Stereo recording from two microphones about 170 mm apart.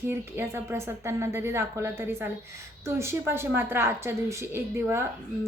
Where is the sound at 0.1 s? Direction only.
15° right (ahead or behind).